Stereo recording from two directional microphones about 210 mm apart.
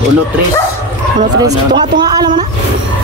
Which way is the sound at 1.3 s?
20° right (ahead or behind).